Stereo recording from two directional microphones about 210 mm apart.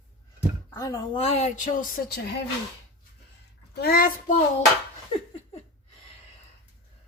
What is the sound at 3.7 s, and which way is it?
Speech, 45° left (ahead or behind).